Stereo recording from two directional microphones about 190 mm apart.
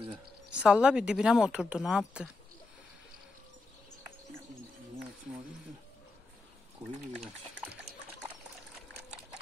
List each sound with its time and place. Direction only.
0.5 s speech: 5° right (ahead or behind)
6.8 s speech: 35° right (ahead or behind)
7.2 s boiling: 5° right (ahead or behind)